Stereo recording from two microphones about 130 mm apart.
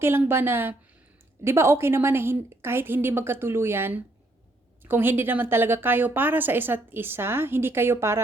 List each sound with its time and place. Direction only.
0.0 s a woman's voice: 20° right (ahead or behind)